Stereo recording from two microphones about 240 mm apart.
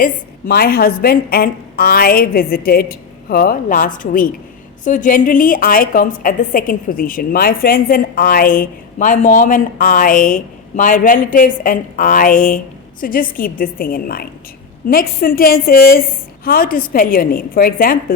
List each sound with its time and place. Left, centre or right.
0.0 s a woman's voice: left